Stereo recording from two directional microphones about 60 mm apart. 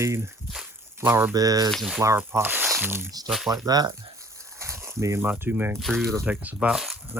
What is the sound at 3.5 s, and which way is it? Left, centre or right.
Speech, right.